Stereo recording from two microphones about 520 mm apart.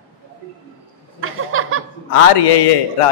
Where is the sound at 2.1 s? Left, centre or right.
Left.